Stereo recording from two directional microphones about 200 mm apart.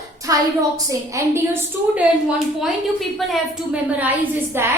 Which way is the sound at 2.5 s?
Centre (ahead or behind).